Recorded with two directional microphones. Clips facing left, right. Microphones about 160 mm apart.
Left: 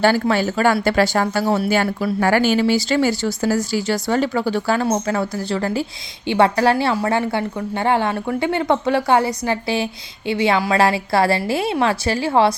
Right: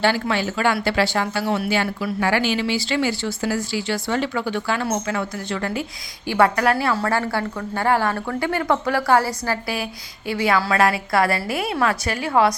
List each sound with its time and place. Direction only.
0.0 s a woman's voice: 45° left (ahead or behind); by 6.9 s 30° left (ahead or behind)
6.9 s a woman's voice: 15° left (ahead or behind)